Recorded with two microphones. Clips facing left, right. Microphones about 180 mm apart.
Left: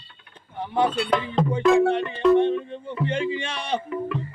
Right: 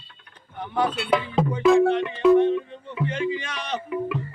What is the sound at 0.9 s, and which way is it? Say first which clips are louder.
Music: even; 5° right (ahead or behind).